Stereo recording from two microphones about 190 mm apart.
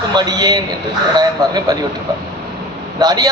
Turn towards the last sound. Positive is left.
turn(degrees=-20)  # may be behind; listen again after turning